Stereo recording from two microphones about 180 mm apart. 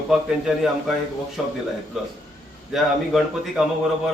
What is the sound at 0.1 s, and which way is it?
A man's voice, centre (ahead or behind).